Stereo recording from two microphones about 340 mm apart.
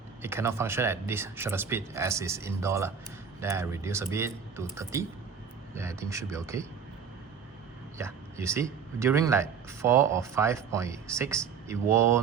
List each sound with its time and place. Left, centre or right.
0.2 s speech: centre
7.9 s speech: centre